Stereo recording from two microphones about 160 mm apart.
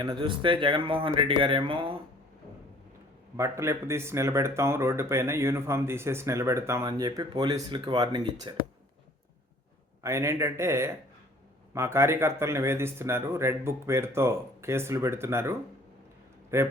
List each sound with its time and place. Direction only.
0.0 s speech: 30° right (ahead or behind)
3.3 s speech: 15° right (ahead or behind)
10.0 s speech: 15° right (ahead or behind)